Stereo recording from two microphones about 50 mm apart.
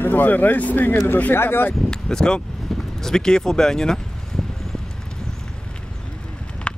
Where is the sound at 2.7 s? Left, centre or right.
Centre.